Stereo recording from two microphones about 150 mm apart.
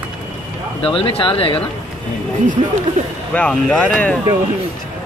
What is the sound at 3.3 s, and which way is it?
Speech, 5° left (ahead or behind).